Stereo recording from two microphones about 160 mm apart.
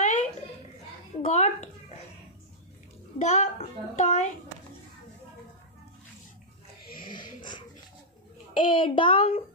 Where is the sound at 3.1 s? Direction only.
40° left (ahead or behind).